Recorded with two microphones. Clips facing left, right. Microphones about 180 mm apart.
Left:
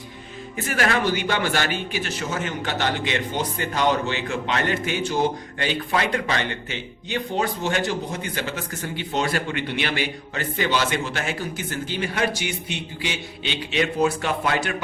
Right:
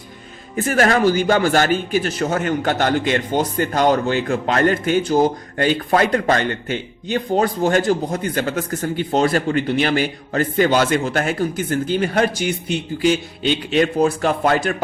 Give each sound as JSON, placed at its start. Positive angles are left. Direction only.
{"t": 0.5, "sound": "a man's voice", "side_deg": -45}